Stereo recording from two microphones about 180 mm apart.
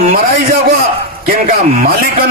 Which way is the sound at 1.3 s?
50° right (ahead or behind).